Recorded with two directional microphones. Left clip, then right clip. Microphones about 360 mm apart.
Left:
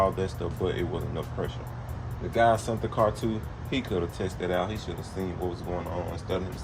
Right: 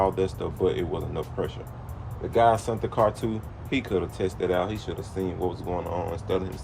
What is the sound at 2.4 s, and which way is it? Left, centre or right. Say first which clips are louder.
Speech: right 2 dB; centre.